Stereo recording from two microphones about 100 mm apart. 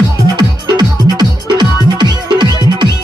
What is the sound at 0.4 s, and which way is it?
Music, 45° right (ahead or behind).